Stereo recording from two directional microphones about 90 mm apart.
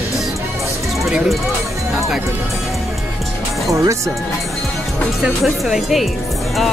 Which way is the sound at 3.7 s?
35° right (ahead or behind).